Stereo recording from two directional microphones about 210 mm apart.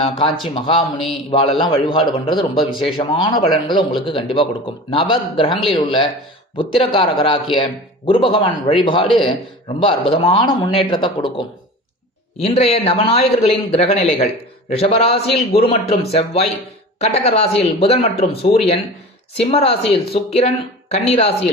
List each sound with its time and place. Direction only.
0.0 s a man's voice: 25° left (ahead or behind)